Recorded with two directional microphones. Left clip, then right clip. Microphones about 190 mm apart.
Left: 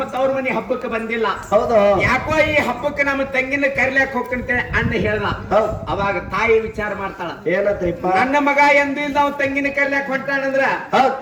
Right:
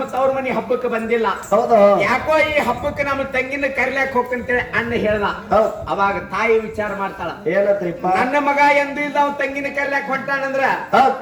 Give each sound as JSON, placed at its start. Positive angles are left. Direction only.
{"t": 0.9, "sound": "speech", "side_deg": 35}